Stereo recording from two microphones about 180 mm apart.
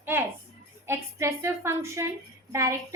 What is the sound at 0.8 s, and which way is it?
A woman's voice, 15° right (ahead or behind).